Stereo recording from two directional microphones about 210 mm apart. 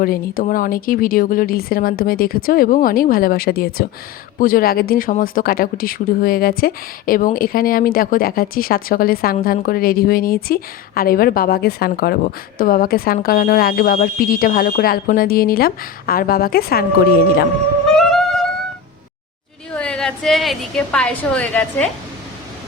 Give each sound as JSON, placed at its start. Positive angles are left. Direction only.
{"t": 0.0, "sound": "speech", "side_deg": 45}
{"t": 17.8, "sound": "music", "side_deg": 0}
{"t": 19.7, "sound": "a woman's voice", "side_deg": 5}